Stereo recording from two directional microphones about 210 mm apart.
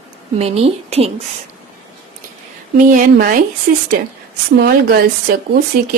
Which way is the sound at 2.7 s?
45° right (ahead or behind).